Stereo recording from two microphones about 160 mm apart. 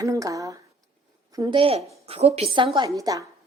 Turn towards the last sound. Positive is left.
turn(degrees=-20)  # may be behind; listen again after turning